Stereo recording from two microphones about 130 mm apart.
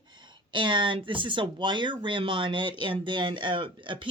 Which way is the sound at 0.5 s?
35° right (ahead or behind).